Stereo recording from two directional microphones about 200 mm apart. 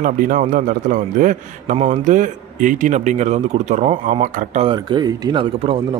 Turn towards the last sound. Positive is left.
turn(degrees=-25)  # may be behind; listen again after turning